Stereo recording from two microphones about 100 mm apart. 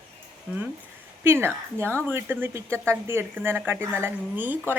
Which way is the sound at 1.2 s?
25° right (ahead or behind).